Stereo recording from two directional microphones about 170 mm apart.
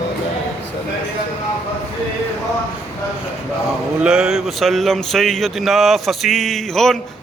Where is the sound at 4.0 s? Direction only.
5° right (ahead or behind).